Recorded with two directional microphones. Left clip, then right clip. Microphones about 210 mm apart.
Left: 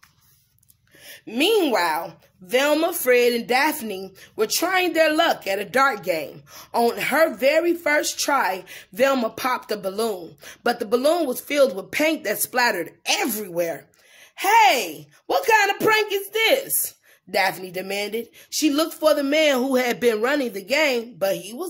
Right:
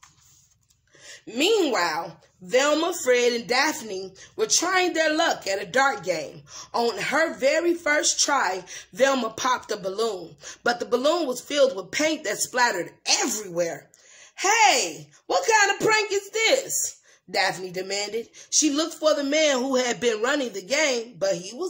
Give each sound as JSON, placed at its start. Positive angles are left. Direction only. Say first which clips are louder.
{"t": 1.2, "sound": "a woman's voice", "louder": "left 2 dB", "side_deg": 30}